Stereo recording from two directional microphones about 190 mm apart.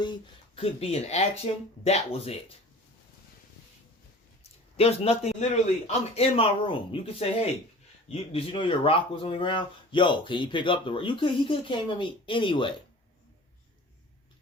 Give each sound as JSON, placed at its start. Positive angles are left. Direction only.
{"t": 0.0, "sound": "a man's voice", "side_deg": 25}
{"t": 4.8, "sound": "a man's voice", "side_deg": 30}